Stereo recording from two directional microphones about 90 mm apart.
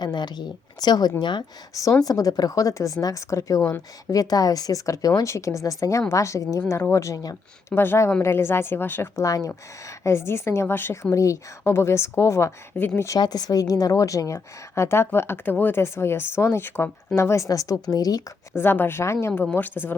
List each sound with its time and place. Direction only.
0.0 s speech: 50° left (ahead or behind)
1.7 s speech: 40° left (ahead or behind)
7.8 s speech: 30° left (ahead or behind)
9.2 s speech: 40° left (ahead or behind)
12.7 s speech: 15° left (ahead or behind)
13.1 s speech: 50° left (ahead or behind)
14.3 s speech: 30° left (ahead or behind); by 18.2 s 45° left (ahead or behind)
18.5 s speech: 25° left (ahead or behind)
19.5 s speech: 20° left (ahead or behind)